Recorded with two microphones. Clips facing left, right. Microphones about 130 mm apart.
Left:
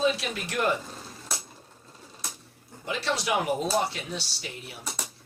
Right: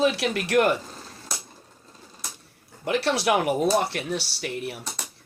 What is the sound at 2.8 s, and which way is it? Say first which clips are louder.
Speech: right 6 dB; 65° right (ahead or behind).